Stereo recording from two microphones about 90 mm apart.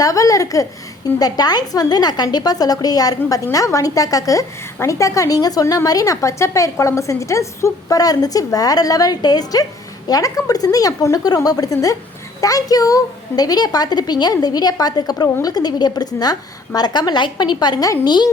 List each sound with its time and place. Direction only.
0.0 s a woman's voice: 40° left (ahead or behind)